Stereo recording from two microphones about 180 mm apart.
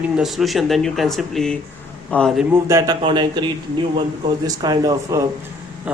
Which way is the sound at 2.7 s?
20° right (ahead or behind).